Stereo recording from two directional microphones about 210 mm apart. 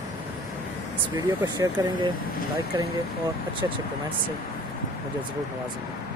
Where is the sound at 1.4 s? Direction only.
20° right (ahead or behind).